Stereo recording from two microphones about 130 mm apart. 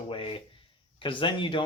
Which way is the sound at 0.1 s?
45° left (ahead or behind).